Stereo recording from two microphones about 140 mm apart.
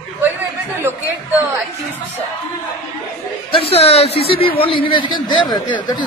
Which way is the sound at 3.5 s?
45° left (ahead or behind).